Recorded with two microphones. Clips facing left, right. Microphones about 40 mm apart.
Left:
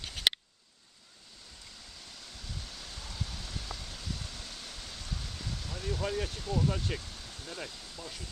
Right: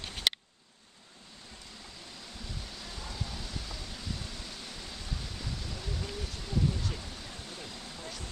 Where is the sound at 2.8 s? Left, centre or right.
Centre.